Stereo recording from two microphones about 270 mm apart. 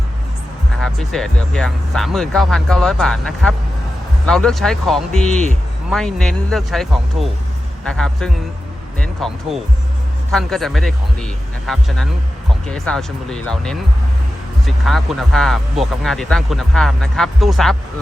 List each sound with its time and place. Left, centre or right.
0.8 s speech: centre
5.3 s a man's voice: left
5.9 s speech: centre